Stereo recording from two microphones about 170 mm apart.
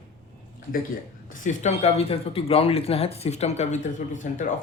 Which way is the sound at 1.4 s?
45° left (ahead or behind).